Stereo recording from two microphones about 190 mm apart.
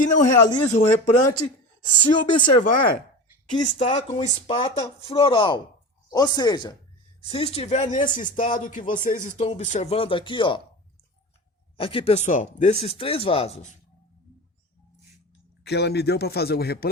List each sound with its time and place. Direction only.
0.5 s speech: 40° left (ahead or behind)
1.9 s speech: 25° left (ahead or behind)
2.6 s speech: 45° left (ahead or behind)
3.8 s speech: 25° left (ahead or behind)
11.8 s speech: 30° left (ahead or behind)
15.6 s speech: 60° left (ahead or behind)